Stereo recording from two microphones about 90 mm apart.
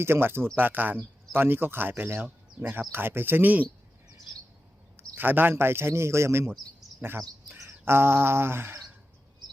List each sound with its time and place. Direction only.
0.0 s speech: 25° right (ahead or behind)
5.1 s speech: 20° right (ahead or behind)
7.5 s bird: 25° right (ahead or behind)